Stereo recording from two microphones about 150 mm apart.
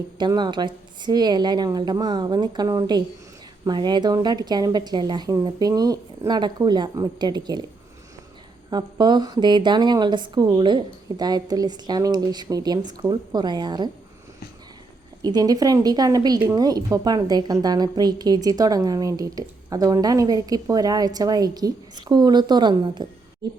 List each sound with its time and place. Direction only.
0.2 s a woman's voice: 30° right (ahead or behind)
8.7 s a woman's voice: 30° right (ahead or behind)
15.2 s a woman's voice: 25° right (ahead or behind)